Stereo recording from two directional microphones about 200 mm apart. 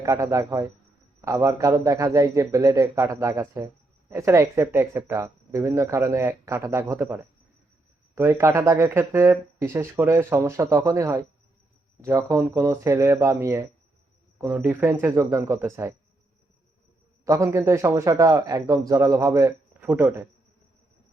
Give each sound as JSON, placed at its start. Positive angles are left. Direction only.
{"t": 0.0, "sound": "speech", "side_deg": -15}
{"t": 17.2, "sound": "speech", "side_deg": -15}